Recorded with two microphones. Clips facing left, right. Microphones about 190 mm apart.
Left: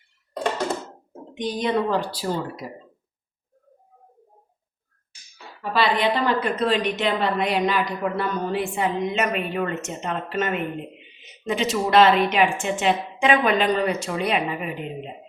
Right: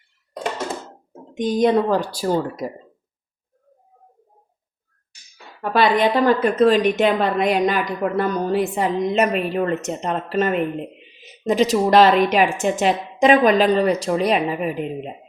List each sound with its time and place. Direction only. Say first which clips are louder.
1.3 s a woman's voice: right 7 dB; 45° right (ahead or behind)
5.6 s a woman's voice: right 4 dB; 50° right (ahead or behind)